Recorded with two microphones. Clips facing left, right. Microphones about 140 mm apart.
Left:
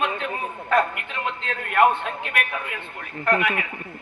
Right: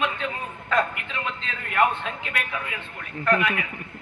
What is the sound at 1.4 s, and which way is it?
A man's voice, 60° left (ahead or behind).